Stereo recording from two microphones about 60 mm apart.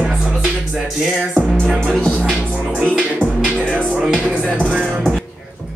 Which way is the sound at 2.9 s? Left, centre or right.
Centre.